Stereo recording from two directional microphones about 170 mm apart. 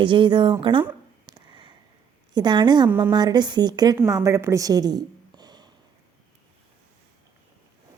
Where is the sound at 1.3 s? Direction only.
25° right (ahead or behind).